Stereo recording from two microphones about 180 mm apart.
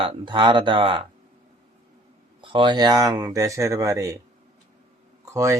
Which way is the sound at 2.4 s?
30° right (ahead or behind).